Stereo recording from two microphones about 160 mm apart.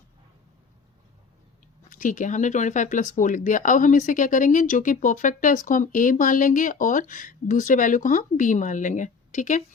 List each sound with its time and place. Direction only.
1.9 s speech: 55° left (ahead or behind)